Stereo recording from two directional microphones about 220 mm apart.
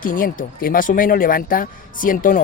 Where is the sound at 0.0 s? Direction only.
40° left (ahead or behind).